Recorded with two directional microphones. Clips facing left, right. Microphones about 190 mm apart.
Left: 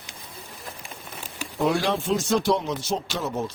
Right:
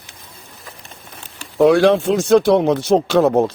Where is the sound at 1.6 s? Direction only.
75° right (ahead or behind).